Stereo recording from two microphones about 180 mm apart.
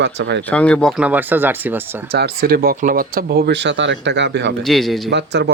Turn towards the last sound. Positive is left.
turn(degrees=-75)  # may be behind; listen again after turning